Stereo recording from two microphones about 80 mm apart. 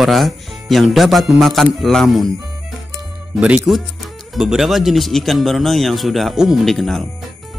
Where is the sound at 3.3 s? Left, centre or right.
Centre.